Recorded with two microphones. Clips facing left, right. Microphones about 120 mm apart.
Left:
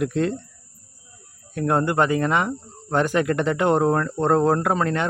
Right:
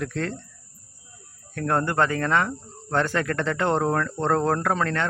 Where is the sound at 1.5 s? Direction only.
15° left (ahead or behind).